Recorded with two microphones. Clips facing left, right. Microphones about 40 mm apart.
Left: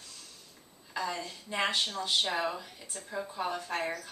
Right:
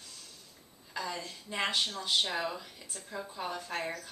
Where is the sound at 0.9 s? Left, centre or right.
Centre.